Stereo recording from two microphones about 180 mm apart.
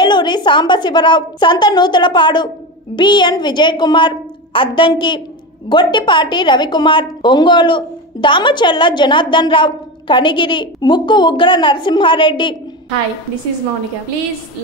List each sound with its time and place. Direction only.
0.0 s a woman's voice: 25° left (ahead or behind)